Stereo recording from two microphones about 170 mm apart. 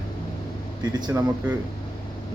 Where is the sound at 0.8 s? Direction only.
25° right (ahead or behind).